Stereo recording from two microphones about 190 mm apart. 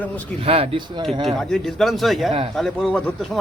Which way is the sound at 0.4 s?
30° right (ahead or behind).